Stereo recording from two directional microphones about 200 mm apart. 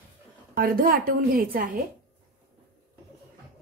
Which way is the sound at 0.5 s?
45° right (ahead or behind).